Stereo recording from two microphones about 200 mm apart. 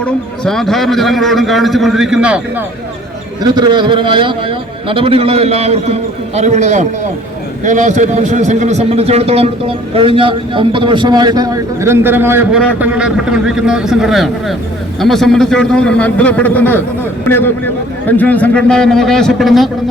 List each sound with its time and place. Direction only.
0.0 s a man's voice: centre (ahead or behind)
3.4 s a man's voice: 20° right (ahead or behind); by 19.7 s centre (ahead or behind)